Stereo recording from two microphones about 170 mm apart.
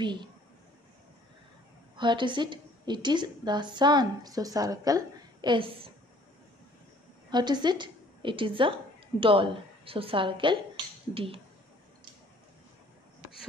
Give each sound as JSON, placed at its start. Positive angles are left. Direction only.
{"t": 0.0, "sound": "a woman's voice", "side_deg": -25}
{"t": 2.0, "sound": "a woman's voice", "side_deg": -30}
{"t": 7.2, "sound": "a woman's voice", "side_deg": -25}